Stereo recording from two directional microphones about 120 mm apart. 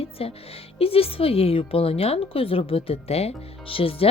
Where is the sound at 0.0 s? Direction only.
55° left (ahead or behind).